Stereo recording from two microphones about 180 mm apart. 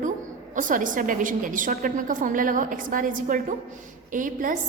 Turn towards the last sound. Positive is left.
turn(degrees=-45)  # may be behind; listen again after turning